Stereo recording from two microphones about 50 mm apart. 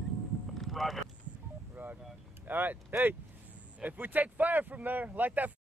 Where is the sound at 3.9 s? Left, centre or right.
Right.